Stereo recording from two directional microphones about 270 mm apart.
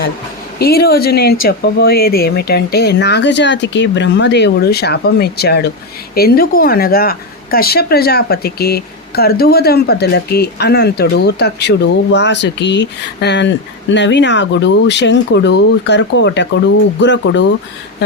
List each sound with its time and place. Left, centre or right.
0.6 s speech: left